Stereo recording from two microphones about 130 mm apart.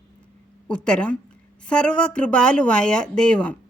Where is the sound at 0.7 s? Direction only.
5° left (ahead or behind).